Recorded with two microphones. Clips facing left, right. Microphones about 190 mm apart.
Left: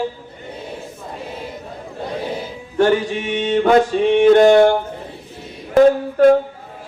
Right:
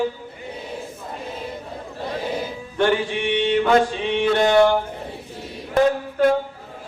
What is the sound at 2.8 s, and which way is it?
Mantra, 40° left (ahead or behind).